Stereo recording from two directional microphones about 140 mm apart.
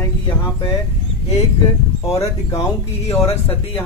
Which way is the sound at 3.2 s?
40° left (ahead or behind).